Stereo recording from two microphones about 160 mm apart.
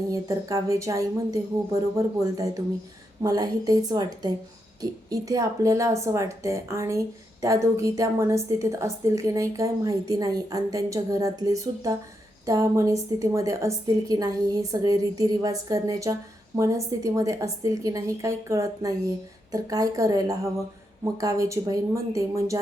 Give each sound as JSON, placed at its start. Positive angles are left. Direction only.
{"t": 0.1, "sound": "a woman's voice", "side_deg": -20}